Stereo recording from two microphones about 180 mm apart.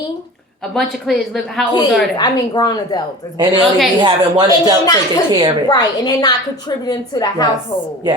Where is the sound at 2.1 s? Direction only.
25° left (ahead or behind).